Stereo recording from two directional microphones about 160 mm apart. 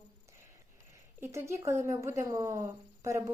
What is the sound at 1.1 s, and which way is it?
A woman's voice, 15° right (ahead or behind).